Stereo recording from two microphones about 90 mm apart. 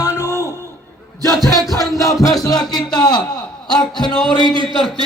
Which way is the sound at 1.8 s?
40° left (ahead or behind).